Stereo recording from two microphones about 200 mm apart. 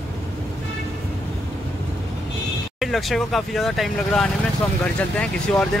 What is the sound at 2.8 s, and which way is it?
Speech, centre (ahead or behind).